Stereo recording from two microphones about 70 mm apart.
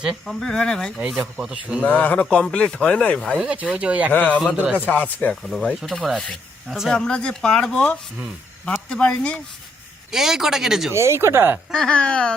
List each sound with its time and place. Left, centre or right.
0.3 s a man's voice: centre
0.9 s speech: centre
1.8 s a man's voice: left
3.3 s a man's voice: centre
4.1 s a man's voice: left
4.4 s a man's voice: centre
5.3 s speech: centre
5.9 s a man's voice: centre
6.7 s speech: centre
7.0 s a man's voice: centre
10.1 s speech: centre
10.9 s speech: right
11.7 s a man's voice: centre